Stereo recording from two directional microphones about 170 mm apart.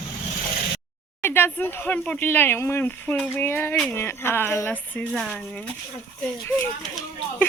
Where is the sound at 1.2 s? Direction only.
10° left (ahead or behind).